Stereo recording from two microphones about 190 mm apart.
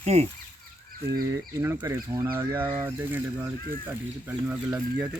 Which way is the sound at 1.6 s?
15° right (ahead or behind).